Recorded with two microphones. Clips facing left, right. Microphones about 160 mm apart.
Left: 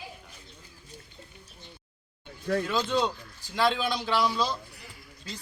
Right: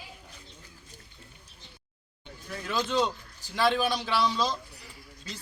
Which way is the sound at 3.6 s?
10° right (ahead or behind).